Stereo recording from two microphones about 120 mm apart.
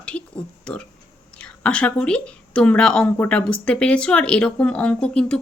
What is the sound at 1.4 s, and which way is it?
A woman's voice, 10° left (ahead or behind).